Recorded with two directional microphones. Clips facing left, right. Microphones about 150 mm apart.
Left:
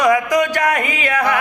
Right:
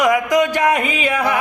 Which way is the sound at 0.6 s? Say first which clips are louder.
Right 2 dB; 10° right (ahead or behind).